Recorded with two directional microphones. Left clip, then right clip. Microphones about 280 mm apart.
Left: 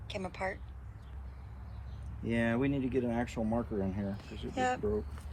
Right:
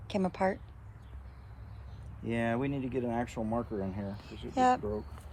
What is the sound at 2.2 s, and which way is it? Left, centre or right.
Speech, right.